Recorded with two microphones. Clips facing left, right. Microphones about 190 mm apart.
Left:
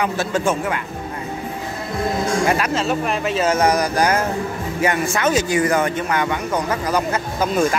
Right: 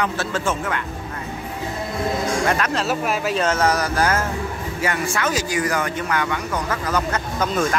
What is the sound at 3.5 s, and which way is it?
Speech, 15° left (ahead or behind).